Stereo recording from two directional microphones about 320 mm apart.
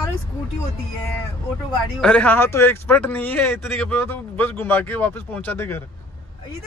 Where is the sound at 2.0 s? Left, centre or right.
Centre.